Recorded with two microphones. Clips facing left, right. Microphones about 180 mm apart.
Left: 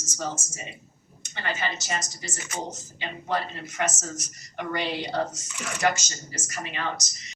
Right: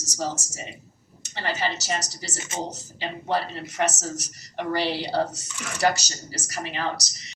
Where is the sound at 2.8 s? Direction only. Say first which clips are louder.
Right 4 dB; 35° right (ahead or behind).